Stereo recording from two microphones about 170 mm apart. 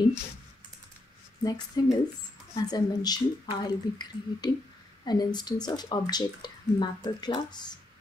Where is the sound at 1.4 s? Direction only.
25° left (ahead or behind).